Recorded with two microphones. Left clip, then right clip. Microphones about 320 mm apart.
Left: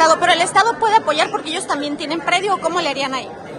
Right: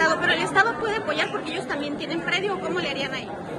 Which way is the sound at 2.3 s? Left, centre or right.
Centre.